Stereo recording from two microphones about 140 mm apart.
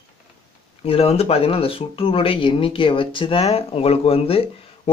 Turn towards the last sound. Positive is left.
turn(degrees=45)  # may be behind; listen again after turning